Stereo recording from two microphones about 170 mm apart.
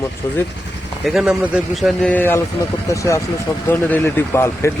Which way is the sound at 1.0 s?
5° right (ahead or behind).